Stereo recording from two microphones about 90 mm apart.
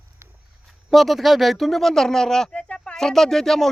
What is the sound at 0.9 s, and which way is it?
Speech, centre (ahead or behind).